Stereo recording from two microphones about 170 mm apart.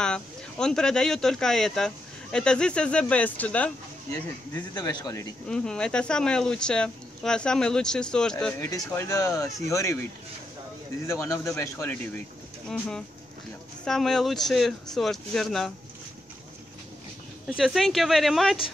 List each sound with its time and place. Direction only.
0.0 s speech: 5° left (ahead or behind)
4.1 s speech: 20° left (ahead or behind)
5.5 s speech: 5° left (ahead or behind)
8.6 s speech: 20° left (ahead or behind)
11.1 s speech: 15° left (ahead or behind)
13.8 s speech: 5° left (ahead or behind)
17.6 s speech: centre (ahead or behind)